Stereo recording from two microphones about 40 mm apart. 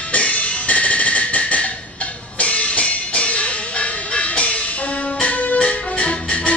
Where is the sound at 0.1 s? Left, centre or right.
Left.